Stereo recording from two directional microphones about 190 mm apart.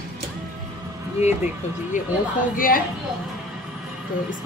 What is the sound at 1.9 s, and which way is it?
Speech, 40° left (ahead or behind).